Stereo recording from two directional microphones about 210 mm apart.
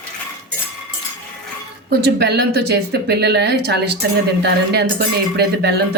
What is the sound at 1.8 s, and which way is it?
Speech, 50° right (ahead or behind).